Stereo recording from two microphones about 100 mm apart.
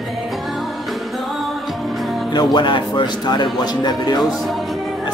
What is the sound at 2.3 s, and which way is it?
Speech, 45° left (ahead or behind).